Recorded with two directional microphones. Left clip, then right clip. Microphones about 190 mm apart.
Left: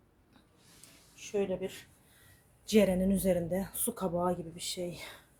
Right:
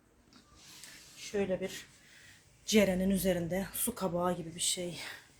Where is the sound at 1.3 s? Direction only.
5° left (ahead or behind).